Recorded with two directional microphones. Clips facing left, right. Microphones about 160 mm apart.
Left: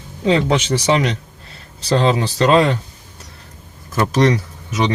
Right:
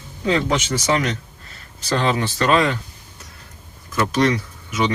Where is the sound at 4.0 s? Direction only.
35° left (ahead or behind).